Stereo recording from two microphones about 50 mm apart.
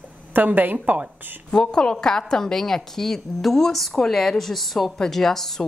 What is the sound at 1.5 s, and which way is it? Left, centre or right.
A woman's voice, centre.